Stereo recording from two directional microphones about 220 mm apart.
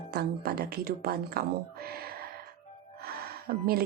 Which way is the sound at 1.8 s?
45° right (ahead or behind).